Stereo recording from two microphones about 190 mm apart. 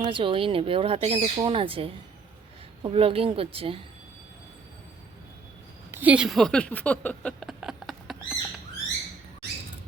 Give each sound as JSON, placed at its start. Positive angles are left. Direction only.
{"t": 0.0, "sound": "speech", "side_deg": -25}
{"t": 5.9, "sound": "speech", "side_deg": -10}